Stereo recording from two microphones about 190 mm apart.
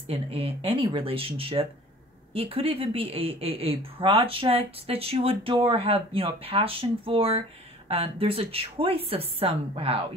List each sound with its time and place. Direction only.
0.0 s speech: 30° right (ahead or behind)